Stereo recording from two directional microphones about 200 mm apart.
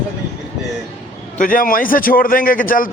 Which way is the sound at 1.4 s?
45° left (ahead or behind).